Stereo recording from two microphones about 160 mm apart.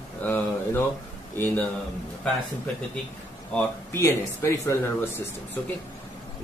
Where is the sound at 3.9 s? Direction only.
15° left (ahead or behind).